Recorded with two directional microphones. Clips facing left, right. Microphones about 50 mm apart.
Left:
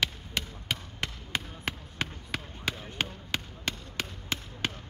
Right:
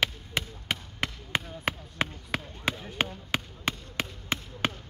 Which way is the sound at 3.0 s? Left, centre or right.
Centre.